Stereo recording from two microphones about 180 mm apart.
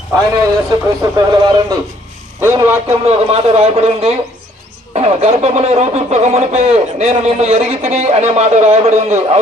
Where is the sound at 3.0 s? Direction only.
35° right (ahead or behind).